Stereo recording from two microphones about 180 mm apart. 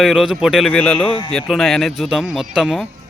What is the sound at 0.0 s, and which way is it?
Speech, centre (ahead or behind).